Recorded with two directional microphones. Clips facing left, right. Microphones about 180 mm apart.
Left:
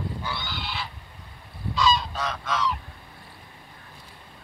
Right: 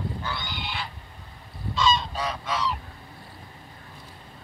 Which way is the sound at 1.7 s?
Centre (ahead or behind).